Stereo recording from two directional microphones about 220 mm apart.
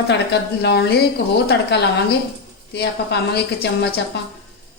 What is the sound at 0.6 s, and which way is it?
A woman's voice, 50° left (ahead or behind).